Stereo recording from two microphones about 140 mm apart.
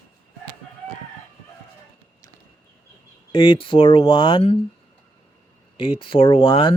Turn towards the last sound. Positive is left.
turn(degrees=35)  # may be behind; listen again after turning